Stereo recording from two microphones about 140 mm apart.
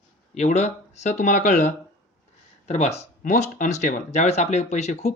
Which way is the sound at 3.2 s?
65° left (ahead or behind).